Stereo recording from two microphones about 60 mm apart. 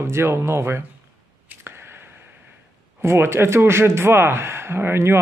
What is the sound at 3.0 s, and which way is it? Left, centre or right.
Speech, right.